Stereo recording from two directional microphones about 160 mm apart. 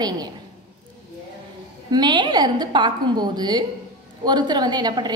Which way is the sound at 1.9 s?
25° right (ahead or behind).